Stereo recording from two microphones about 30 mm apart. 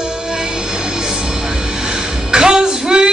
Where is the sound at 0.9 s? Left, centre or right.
Right.